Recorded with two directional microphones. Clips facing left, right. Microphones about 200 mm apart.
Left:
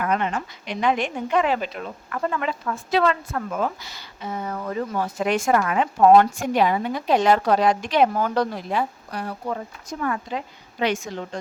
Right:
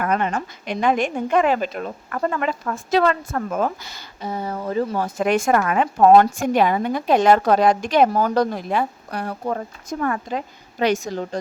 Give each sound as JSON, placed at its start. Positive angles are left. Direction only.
{"t": 0.0, "sound": "a woman's voice", "side_deg": -45}
{"t": 5.0, "sound": "a woman's voice", "side_deg": -50}